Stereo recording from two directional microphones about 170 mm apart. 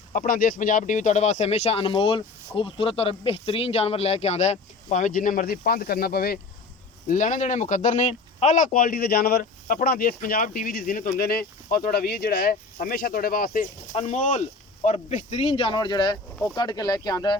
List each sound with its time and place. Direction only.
0.1 s speech: 50° left (ahead or behind)
7.1 s speech: 45° left (ahead or behind); by 17.3 s 25° left (ahead or behind)